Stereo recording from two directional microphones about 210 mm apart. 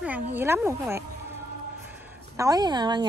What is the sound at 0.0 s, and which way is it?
Speech, 10° right (ahead or behind).